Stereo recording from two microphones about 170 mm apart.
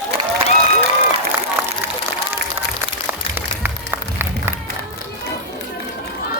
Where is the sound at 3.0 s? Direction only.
10° right (ahead or behind).